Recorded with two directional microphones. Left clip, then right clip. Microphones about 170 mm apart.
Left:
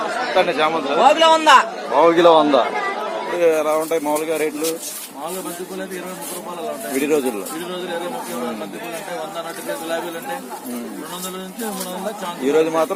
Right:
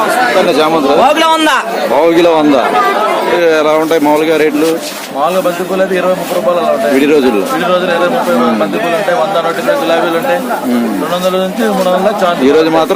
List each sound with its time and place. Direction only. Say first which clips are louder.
1.0 s a man's voice: right 4 dB; 45° right (ahead or behind)
2.0 s a man's voice: right 3 dB; 30° right (ahead or behind)
3.4 s speech: right 5 dB; 15° right (ahead or behind)